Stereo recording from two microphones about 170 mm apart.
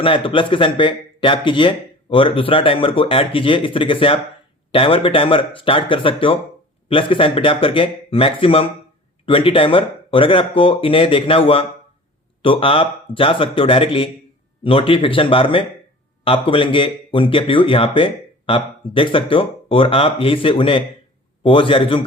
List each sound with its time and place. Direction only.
0.0 s speech: 30° left (ahead or behind)